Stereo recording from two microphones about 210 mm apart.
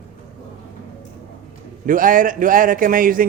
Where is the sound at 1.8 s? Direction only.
40° right (ahead or behind).